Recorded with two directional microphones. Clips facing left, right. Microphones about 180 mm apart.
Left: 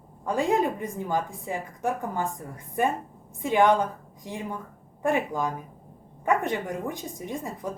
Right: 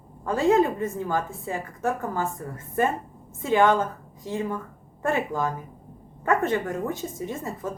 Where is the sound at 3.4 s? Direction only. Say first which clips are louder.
Right 1 dB; 15° left (ahead or behind).